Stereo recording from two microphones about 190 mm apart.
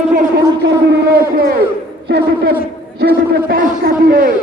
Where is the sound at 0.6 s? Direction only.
60° right (ahead or behind).